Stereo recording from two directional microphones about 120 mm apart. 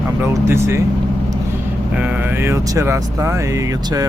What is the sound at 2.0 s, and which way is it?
Speech, 15° right (ahead or behind).